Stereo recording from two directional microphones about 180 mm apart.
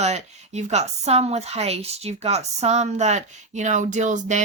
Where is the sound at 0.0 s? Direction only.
40° right (ahead or behind).